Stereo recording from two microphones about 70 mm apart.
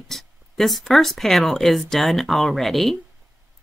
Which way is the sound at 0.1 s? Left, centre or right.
Centre.